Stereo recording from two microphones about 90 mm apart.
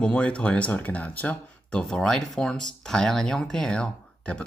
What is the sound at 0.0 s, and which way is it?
Speech, 10° left (ahead or behind).